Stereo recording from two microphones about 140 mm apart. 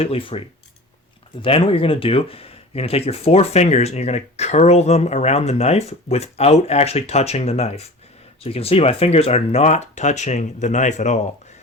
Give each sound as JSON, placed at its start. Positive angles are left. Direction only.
{"t": 0.0, "sound": "speech", "side_deg": 40}